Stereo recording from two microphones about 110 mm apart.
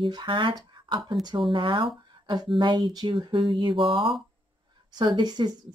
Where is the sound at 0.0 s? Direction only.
45° right (ahead or behind).